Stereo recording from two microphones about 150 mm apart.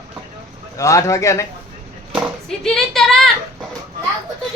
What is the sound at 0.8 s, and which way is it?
Speech, 20° left (ahead or behind).